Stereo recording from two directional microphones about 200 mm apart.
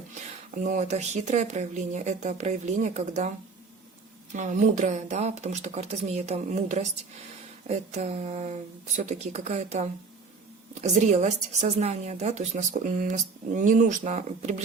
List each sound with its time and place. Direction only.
0.6 s a woman's voice: 40° right (ahead or behind)